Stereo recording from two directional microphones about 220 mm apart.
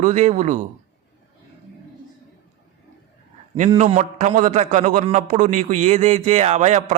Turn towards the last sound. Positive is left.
turn(degrees=-30)  # may be behind; listen again after turning